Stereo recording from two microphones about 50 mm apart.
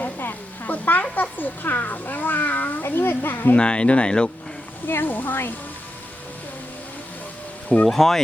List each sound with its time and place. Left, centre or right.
0.0 s a sound: left
1.1 s a child's voice: left
3.5 s speech: left
4.9 s speech: left
7.9 s speech: centre